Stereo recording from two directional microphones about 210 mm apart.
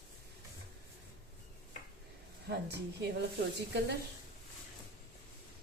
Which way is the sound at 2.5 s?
50° right (ahead or behind).